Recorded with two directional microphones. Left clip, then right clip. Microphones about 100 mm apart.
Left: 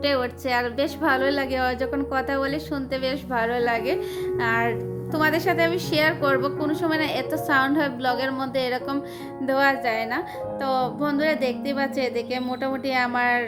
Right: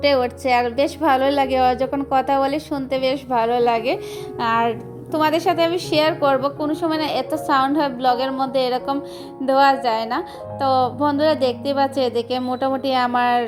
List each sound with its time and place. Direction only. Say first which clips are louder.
0.0 s a woman's voice: right 6 dB; 35° right (ahead or behind)